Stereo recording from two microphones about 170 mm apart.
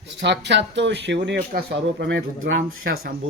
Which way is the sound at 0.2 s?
90° right.